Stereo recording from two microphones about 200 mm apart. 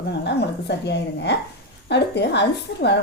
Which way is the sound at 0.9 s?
60° left (ahead or behind).